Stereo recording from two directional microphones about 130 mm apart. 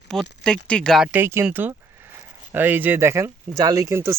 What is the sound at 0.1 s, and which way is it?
Speech, 5° left (ahead or behind).